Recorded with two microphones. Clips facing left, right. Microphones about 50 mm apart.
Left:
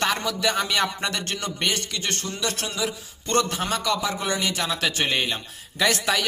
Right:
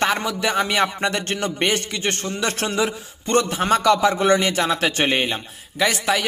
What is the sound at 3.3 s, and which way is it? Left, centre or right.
Speech, right.